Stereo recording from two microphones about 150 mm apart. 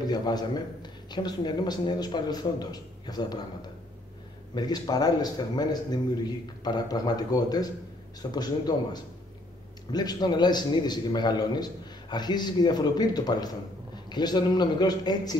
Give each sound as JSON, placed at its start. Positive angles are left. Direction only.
{"t": 0.0, "sound": "a man's voice", "side_deg": 25}